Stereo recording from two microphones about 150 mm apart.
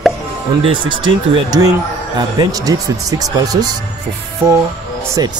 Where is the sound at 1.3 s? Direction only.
25° right (ahead or behind).